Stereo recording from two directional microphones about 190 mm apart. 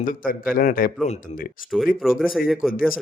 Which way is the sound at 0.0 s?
45° left (ahead or behind).